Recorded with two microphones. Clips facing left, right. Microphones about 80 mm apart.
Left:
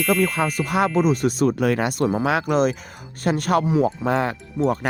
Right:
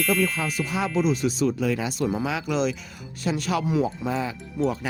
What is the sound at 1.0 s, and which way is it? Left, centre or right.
Speech, left.